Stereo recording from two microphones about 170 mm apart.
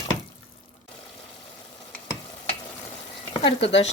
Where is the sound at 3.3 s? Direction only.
30° left (ahead or behind).